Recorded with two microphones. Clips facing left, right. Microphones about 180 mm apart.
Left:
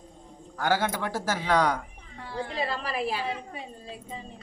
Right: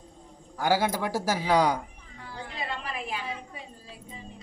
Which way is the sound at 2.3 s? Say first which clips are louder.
Left 5 dB; 30° left (ahead or behind).